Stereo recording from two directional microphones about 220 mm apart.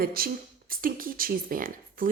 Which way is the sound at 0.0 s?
40° right (ahead or behind).